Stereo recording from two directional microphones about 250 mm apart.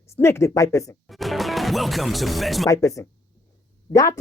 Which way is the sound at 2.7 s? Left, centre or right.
Centre.